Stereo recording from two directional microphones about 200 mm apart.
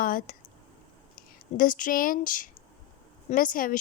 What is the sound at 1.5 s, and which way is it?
A woman's voice, 40° left (ahead or behind).